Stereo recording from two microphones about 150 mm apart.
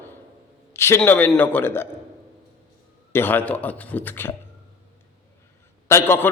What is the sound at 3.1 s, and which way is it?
A man's voice, 10° left (ahead or behind).